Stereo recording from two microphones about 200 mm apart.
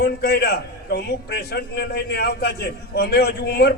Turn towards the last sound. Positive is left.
turn(degrees=55)  # may be behind; listen again after turning